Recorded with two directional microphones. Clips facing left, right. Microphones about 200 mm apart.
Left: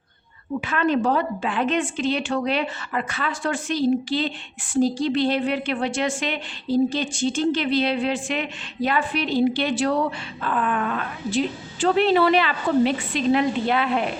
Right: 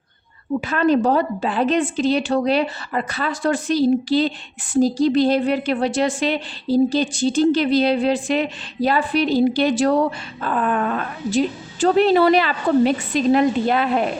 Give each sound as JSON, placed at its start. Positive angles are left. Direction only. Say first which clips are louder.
{"t": 0.6, "sound": "a woman's voice", "louder": "right 4 dB", "side_deg": -35}